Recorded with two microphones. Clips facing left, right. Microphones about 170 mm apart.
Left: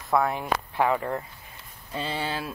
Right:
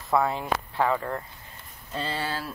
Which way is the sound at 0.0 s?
Centre (ahead or behind).